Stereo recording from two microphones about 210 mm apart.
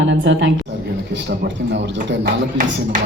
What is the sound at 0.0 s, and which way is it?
A man's voice, 60° right (ahead or behind).